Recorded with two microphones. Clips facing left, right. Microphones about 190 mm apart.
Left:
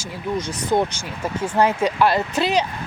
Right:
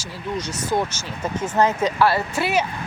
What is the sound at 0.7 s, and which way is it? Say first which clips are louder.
Speech: left 4 dB; 10° left (ahead or behind).